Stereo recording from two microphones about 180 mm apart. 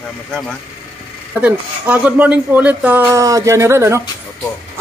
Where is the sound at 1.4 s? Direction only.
10° right (ahead or behind).